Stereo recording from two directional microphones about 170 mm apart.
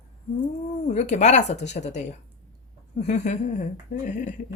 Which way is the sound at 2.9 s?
45° left (ahead or behind).